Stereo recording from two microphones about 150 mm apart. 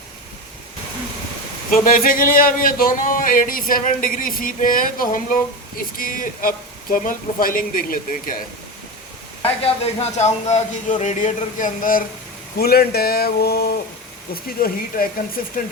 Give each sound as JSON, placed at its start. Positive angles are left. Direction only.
{"t": 1.7, "sound": "speech", "side_deg": 65}
{"t": 9.6, "sound": "speech", "side_deg": 45}
{"t": 12.5, "sound": "speech", "side_deg": 90}
{"t": 14.6, "sound": "speech", "side_deg": 75}